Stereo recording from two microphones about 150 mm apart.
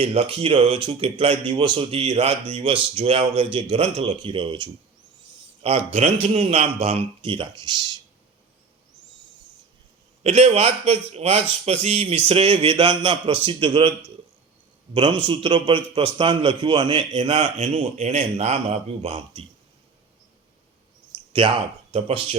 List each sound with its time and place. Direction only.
0.0 s speech: 40° right (ahead or behind)
5.6 s speech: 45° right (ahead or behind); by 7.9 s 30° right (ahead or behind)
10.2 s a man's voice: 45° right (ahead or behind)
14.9 s speech: 35° right (ahead or behind)
21.1 s a sound: 35° right (ahead or behind)
21.9 s speech: 40° right (ahead or behind)